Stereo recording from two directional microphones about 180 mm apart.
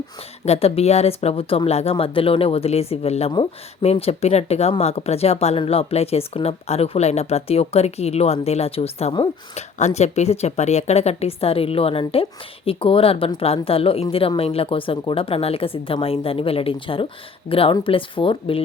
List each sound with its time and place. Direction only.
0.4 s speech: 35° left (ahead or behind)